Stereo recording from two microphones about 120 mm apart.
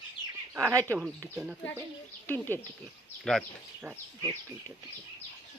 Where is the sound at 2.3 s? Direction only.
20° left (ahead or behind).